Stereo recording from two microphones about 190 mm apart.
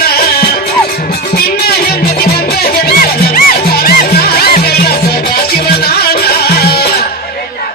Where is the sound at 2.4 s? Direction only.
55° left (ahead or behind).